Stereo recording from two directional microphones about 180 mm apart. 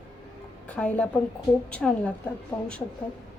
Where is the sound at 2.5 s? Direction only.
15° left (ahead or behind).